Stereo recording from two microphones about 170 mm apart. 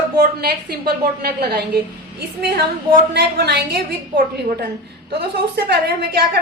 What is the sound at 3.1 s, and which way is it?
Speech, 75° right (ahead or behind).